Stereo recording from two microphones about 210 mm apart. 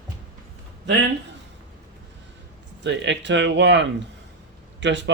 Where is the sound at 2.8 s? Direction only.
55° right (ahead or behind).